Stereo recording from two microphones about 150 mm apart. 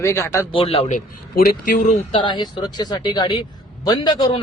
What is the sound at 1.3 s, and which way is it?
Speech, 70° left (ahead or behind).